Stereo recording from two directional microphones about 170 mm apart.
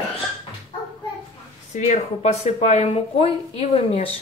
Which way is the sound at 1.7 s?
40° left (ahead or behind).